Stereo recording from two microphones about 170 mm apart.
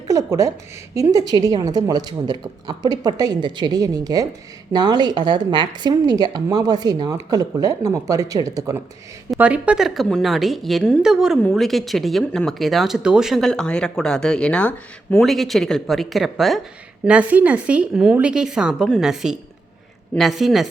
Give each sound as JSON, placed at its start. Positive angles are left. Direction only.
{"t": 0.1, "sound": "speech", "side_deg": -20}
{"t": 9.3, "sound": "speech", "side_deg": -5}